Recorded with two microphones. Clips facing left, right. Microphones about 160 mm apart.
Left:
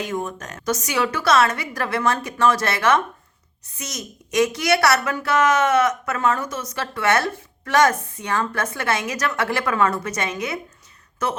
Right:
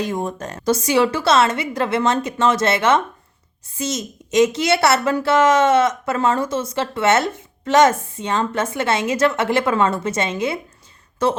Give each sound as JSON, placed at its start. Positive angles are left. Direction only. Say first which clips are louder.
{"t": 0.0, "sound": "a woman's voice", "louder": "right 3 dB", "side_deg": -35}